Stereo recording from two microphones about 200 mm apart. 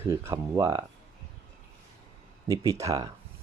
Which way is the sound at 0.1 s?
15° right (ahead or behind).